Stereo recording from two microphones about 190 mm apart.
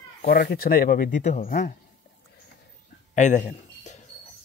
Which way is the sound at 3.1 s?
40° left (ahead or behind).